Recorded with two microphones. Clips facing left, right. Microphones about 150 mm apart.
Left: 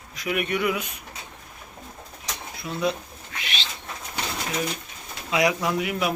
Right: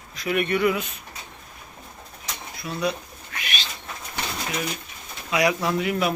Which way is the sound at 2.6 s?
20° left (ahead or behind).